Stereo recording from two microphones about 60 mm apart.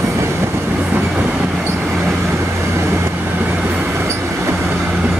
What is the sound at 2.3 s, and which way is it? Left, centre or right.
Vehicle, right.